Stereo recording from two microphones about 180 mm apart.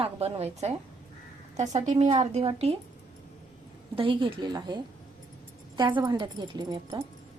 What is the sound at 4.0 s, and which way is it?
A woman's voice, 30° right (ahead or behind).